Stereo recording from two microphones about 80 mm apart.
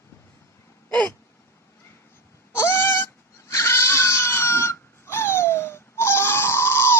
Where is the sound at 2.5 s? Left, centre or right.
Left.